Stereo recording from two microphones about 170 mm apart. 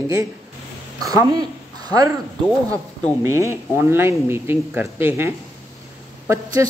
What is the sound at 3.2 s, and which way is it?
Speech, 15° right (ahead or behind).